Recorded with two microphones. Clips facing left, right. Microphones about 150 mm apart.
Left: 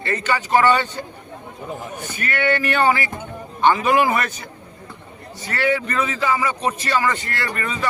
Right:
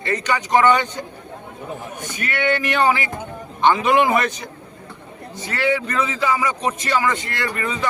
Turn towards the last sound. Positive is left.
turn(degrees=-15)  # may be behind; listen again after turning